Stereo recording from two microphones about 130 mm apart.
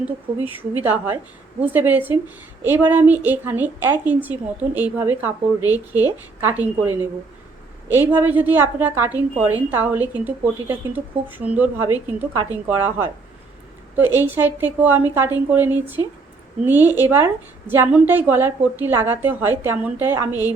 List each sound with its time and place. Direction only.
0.0 s a woman's voice: 15° right (ahead or behind)